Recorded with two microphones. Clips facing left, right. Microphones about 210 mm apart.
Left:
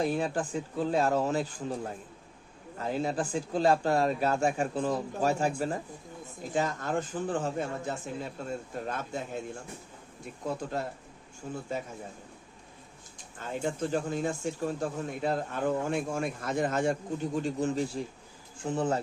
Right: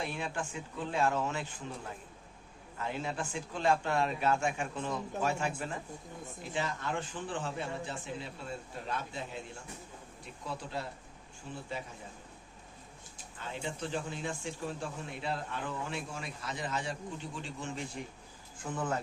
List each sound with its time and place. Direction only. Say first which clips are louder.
0.0 s speech: left 8 dB; 40° left (ahead or behind)
10.4 s speech: left 6 dB; 45° left (ahead or behind)
13.4 s speech: left 7 dB; 45° left (ahead or behind)